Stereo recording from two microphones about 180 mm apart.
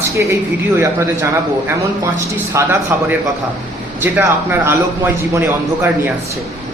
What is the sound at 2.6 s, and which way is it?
A man's voice, 15° right (ahead or behind).